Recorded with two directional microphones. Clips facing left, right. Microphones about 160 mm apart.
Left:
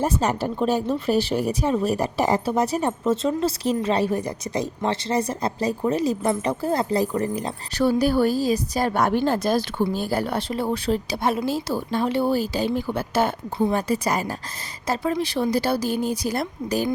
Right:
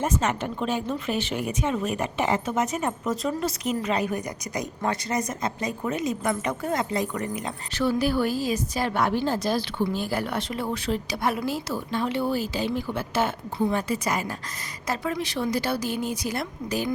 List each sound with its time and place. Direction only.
0.0 s speech: 35° left (ahead or behind)
9.8 s speech: 35° left (ahead or behind)